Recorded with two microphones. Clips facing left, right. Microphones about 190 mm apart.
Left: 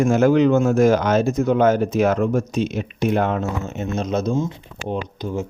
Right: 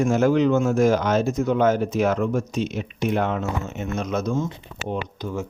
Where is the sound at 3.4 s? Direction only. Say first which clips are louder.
Left 2 dB; 35° left (ahead or behind).